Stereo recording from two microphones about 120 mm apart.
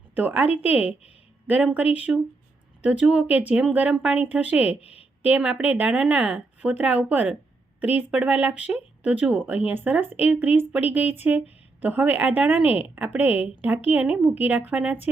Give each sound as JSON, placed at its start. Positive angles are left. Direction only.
{"t": 0.1, "sound": "speech", "side_deg": -15}
{"t": 4.8, "sound": "a woman's voice", "side_deg": 60}
{"t": 5.2, "sound": "speech", "side_deg": -10}